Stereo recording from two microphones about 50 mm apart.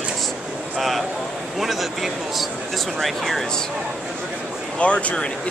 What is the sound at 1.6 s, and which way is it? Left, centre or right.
Speech, centre.